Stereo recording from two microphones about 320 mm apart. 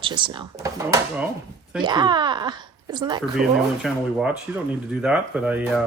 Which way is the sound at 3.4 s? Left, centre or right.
Right.